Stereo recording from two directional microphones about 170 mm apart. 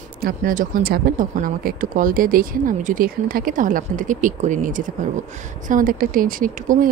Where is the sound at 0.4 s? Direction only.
50° right (ahead or behind).